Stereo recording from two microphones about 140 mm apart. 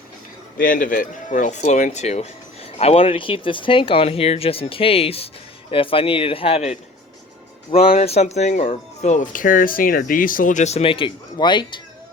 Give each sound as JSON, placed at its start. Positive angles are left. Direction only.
{"t": 0.6, "sound": "speech", "side_deg": 75}